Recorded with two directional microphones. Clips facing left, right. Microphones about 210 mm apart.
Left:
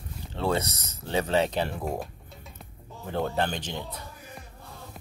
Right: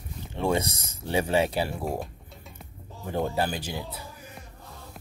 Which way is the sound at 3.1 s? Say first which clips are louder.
Right 1 dB; 10° right (ahead or behind).